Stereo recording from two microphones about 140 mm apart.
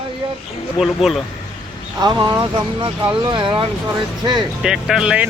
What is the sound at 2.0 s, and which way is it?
Speech, 30° right (ahead or behind).